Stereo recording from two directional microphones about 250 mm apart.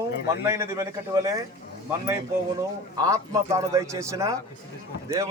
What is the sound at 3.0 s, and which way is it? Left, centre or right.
A man's voice, centre.